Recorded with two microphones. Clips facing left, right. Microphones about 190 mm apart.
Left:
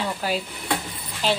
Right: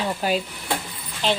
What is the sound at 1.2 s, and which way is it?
Speech, 5° left (ahead or behind).